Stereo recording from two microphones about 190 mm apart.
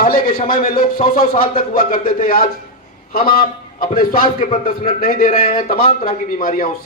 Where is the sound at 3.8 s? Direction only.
50° left (ahead or behind).